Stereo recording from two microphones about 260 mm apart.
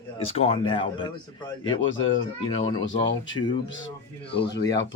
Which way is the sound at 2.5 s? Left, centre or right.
Left.